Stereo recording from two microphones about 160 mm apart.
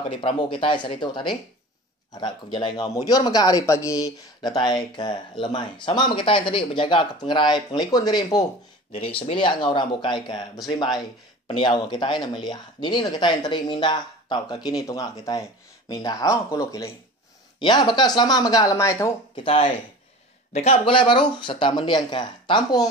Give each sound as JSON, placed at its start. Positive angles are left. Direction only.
{"t": 0.1, "sound": "speech", "side_deg": 30}
{"t": 19.3, "sound": "speech", "side_deg": 35}